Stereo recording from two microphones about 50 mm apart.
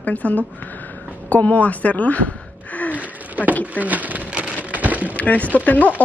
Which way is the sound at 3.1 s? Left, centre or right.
Right.